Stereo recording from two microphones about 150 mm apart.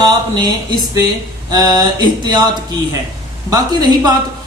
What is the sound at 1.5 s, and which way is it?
Speech, 25° right (ahead or behind).